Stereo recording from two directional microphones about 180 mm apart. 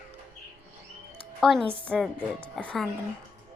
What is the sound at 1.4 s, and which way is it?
A woman's voice, 5° left (ahead or behind).